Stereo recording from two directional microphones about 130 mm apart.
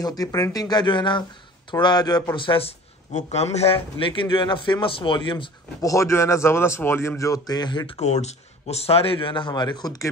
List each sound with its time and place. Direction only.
0.0 s a man's voice: 30° left (ahead or behind)
2.3 s a man's voice: 40° left (ahead or behind)
5.8 s speech: 25° left (ahead or behind)
8.0 s speech: 60° left (ahead or behind); by 10.0 s 30° left (ahead or behind)